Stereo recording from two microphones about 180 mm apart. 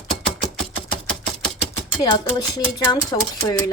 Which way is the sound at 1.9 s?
25° left (ahead or behind).